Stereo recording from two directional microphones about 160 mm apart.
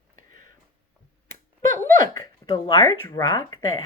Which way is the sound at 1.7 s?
15° left (ahead or behind).